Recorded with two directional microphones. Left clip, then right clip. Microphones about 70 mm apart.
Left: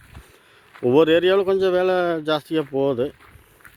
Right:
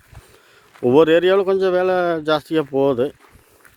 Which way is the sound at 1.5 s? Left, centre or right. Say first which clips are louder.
Right 2 dB; centre.